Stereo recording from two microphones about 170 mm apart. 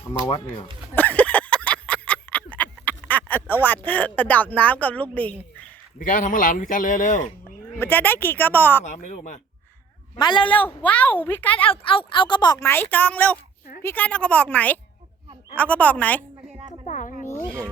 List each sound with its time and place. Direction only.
0.9 s a sound: 10° left (ahead or behind)
6.0 s speech: 50° left (ahead or behind)
7.8 s a woman's voice: 10° left (ahead or behind)
8.9 s speech: 45° left (ahead or behind)
10.2 s a woman's voice: 25° left (ahead or behind)
10.5 s a woman's voice: 10° left (ahead or behind)
11.6 s a woman's voice: 30° left (ahead or behind)
12.6 s a woman's voice: 10° left (ahead or behind)
16.6 s a sound: 45° left (ahead or behind)
17.2 s a sound: 10° left (ahead or behind)